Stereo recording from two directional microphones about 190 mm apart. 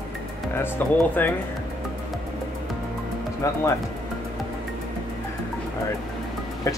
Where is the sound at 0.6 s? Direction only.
10° left (ahead or behind).